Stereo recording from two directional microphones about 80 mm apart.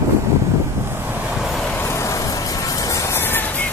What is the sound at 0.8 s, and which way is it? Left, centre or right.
Waves, right.